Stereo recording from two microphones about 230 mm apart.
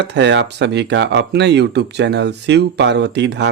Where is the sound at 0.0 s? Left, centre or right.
Right.